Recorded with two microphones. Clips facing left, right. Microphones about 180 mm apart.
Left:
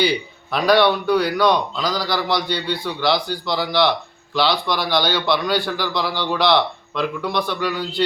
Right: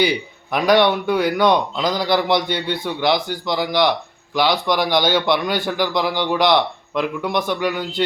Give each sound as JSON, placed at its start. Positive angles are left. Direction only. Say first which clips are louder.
{"t": 0.0, "sound": "a man's voice", "louder": "right 1 dB", "side_deg": -15}